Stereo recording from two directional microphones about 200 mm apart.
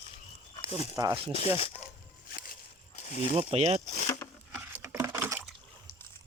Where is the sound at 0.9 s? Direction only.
20° right (ahead or behind).